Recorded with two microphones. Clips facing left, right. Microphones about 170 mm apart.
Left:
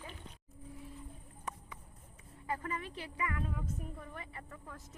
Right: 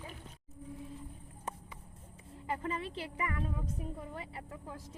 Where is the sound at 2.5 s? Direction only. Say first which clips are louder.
Right 2 dB; 25° right (ahead or behind).